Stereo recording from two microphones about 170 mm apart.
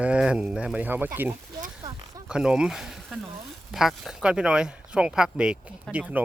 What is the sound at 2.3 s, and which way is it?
Speech, 5° right (ahead or behind).